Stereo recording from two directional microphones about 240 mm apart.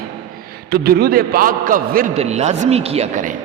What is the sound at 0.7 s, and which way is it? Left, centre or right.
A man's voice, right.